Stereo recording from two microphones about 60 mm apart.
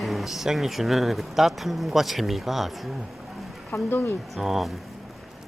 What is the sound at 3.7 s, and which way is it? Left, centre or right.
Speech, left.